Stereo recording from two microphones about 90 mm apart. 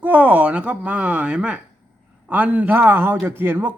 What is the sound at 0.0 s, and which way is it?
Speech, 15° right (ahead or behind).